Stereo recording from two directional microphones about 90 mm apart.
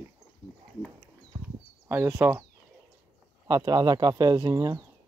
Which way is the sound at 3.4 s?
45° right (ahead or behind).